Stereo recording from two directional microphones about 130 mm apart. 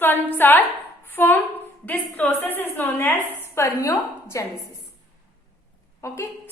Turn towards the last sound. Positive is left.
turn(degrees=20)  # may be behind; listen again after turning